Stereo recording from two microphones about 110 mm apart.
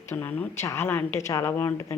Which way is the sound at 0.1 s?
15° left (ahead or behind).